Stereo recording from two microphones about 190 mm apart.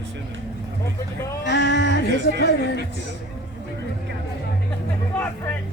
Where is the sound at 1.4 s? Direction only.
65° left (ahead or behind).